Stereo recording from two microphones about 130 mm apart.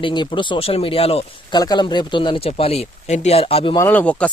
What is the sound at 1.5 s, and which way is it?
Speech, 30° left (ahead or behind).